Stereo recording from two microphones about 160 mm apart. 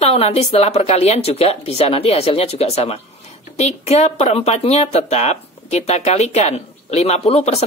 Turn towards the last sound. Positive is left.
turn(degrees=40)  # may be behind; listen again after turning